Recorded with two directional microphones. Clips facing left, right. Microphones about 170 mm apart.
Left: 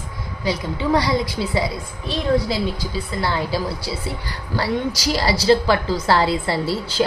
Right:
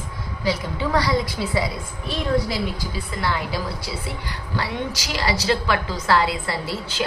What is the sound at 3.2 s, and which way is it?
A woman's voice, 30° left (ahead or behind).